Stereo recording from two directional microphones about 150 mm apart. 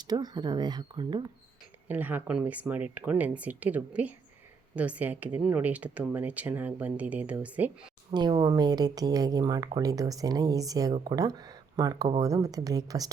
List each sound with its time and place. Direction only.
0.0 s speech: 25° right (ahead or behind)
1.9 s speech: 10° right (ahead or behind)
8.1 s speech: 30° right (ahead or behind)